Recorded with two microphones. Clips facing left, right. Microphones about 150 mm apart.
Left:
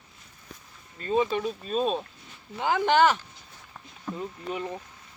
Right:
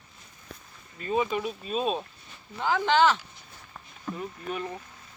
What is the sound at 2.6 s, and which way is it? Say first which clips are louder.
Speech: left 1 dB; 15° left (ahead or behind).